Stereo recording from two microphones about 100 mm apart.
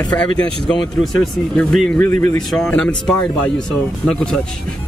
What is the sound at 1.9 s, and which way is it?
Speech, 20° left (ahead or behind).